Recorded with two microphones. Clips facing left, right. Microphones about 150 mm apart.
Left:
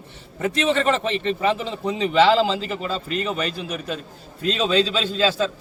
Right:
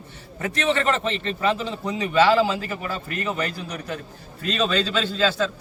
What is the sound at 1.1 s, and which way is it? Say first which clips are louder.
A man's voice: left 2 dB; 20° left (ahead or behind).